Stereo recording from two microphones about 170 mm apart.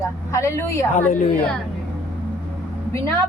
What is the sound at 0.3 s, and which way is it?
Speech, 15° left (ahead or behind).